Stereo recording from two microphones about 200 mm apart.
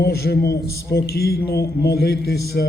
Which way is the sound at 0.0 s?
55° left (ahead or behind).